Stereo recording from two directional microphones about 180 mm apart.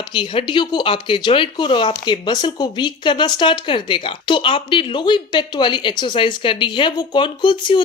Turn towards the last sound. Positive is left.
turn(degrees=25)  # may be behind; listen again after turning